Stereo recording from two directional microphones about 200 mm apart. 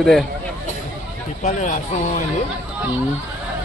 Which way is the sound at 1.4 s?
40° left (ahead or behind).